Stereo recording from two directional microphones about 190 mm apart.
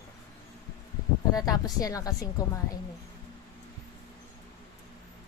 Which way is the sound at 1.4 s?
20° left (ahead or behind).